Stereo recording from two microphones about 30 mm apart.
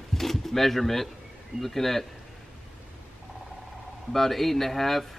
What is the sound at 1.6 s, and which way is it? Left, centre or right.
Speech, centre.